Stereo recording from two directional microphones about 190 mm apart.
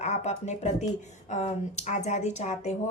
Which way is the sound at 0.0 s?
35° left (ahead or behind).